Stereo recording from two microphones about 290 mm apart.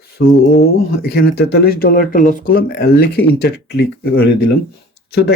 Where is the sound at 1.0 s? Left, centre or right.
Left.